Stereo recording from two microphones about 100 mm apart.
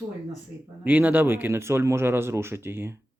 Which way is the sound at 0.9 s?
15° right (ahead or behind).